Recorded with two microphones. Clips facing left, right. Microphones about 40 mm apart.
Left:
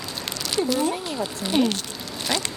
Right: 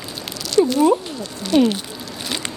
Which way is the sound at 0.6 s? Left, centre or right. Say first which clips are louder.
Right 9 dB; centre.